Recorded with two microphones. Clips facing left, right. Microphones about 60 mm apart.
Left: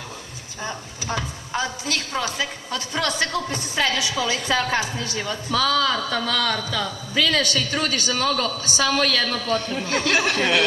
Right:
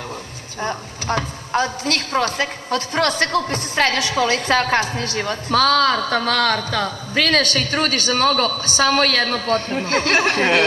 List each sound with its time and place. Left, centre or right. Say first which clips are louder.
0.6 s speech: right 6 dB; right